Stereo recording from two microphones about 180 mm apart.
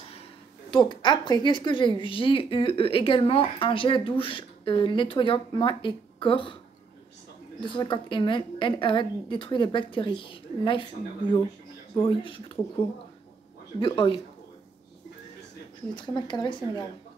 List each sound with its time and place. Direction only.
0.7 s a woman's voice: 25° left (ahead or behind)
7.6 s a woman's voice: 25° left (ahead or behind)
12.0 s a woman's voice: 30° left (ahead or behind)
13.7 s a woman's voice: 30° left (ahead or behind)
15.9 s a woman's voice: 25° left (ahead or behind)